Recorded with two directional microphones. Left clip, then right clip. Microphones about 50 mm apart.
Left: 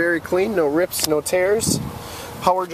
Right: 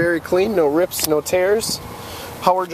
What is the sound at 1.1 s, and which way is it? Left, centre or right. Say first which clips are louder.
Speech: right 2 dB; centre.